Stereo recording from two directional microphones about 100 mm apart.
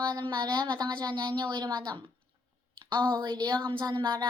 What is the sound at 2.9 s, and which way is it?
Speech, 50° right (ahead or behind).